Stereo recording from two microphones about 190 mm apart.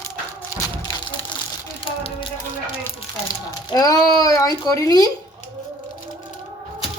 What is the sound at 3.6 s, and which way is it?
Speech, 20° left (ahead or behind).